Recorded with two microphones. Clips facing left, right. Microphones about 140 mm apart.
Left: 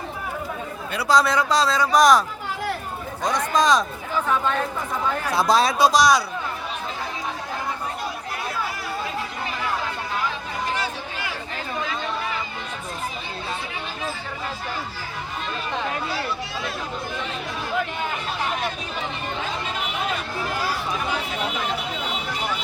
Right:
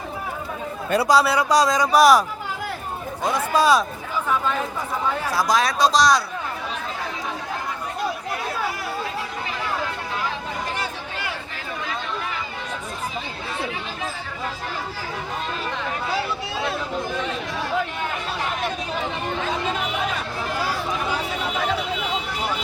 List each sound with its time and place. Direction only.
1.0 s speech: 10° right (ahead or behind)
3.2 s speech: 5° right (ahead or behind)
5.3 s speech: 25° left (ahead or behind)
5.8 s speech: 5° left (ahead or behind)